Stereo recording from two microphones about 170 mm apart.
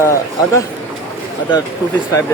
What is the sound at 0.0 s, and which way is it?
Speech, 15° left (ahead or behind).